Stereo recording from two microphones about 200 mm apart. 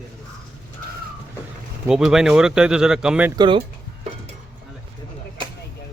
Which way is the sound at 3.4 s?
25° right (ahead or behind).